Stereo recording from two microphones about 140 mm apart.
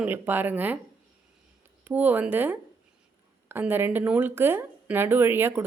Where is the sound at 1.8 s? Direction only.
10° right (ahead or behind).